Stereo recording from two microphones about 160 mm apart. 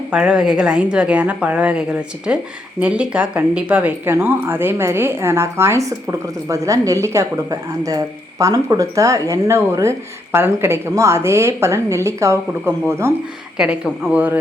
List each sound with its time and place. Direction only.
0.1 s speech: 5° right (ahead or behind)
13.6 s speech: 5° right (ahead or behind)